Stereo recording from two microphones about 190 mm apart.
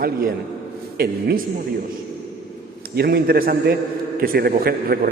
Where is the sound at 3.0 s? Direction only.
55° right (ahead or behind).